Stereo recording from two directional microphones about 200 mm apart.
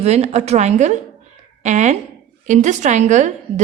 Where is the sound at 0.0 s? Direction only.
35° right (ahead or behind).